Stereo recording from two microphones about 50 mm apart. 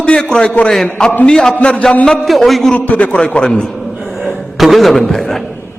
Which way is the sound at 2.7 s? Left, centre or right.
Left.